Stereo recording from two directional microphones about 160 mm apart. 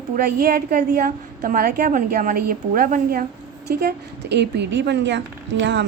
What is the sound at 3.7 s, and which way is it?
A woman's voice, 90° right.